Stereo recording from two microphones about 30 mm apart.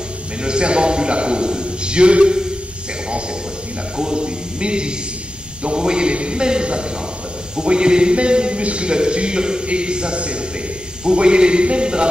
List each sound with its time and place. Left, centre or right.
0.4 s a man's voice: right
4.0 s a man's voice: right